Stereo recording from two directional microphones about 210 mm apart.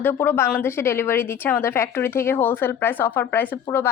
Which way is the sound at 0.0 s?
10° left (ahead or behind).